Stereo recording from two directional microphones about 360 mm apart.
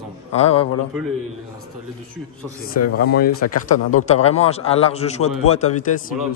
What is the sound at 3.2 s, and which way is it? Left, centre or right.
Speech, left.